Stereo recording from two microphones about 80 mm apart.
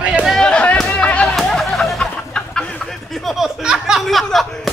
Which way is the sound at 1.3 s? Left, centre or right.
Centre.